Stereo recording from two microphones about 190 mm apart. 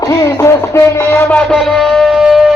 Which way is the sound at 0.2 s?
15° left (ahead or behind).